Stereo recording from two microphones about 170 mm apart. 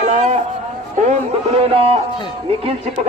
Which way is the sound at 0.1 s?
45° right (ahead or behind).